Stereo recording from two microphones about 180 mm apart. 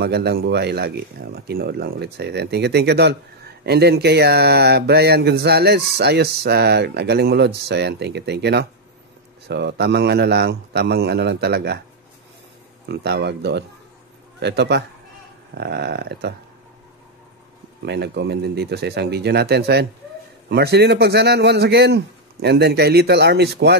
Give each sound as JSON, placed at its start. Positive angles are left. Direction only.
{"t": 0.0, "sound": "a man's voice", "side_deg": -65}
{"t": 12.8, "sound": "a man's voice", "side_deg": -65}
{"t": 17.8, "sound": "speech", "side_deg": -70}